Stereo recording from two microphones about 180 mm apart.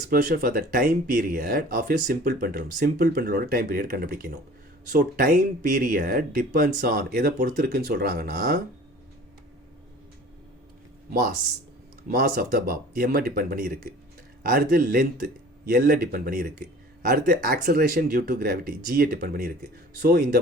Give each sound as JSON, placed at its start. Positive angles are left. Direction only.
{"t": 0.1, "sound": "speech", "side_deg": -55}
{"t": 12.1, "sound": "speech", "side_deg": -60}